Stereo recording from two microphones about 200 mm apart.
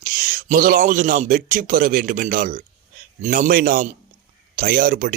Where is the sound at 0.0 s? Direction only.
40° right (ahead or behind).